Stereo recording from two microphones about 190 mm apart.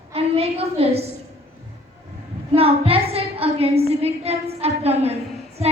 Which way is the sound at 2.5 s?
30° right (ahead or behind).